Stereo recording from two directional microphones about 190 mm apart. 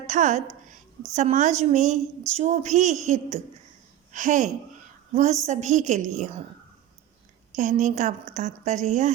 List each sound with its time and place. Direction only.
0.1 s a woman's voice: 40° right (ahead or behind)
7.5 s a woman's voice: 40° right (ahead or behind)